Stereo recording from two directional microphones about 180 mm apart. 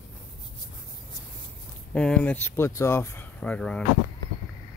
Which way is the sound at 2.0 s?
5° left (ahead or behind).